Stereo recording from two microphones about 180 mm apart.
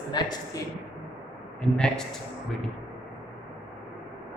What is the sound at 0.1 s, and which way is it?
Speech, 20° left (ahead or behind).